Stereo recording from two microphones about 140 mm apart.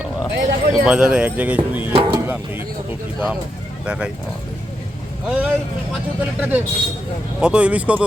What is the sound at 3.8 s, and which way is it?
Speech, 5° right (ahead or behind).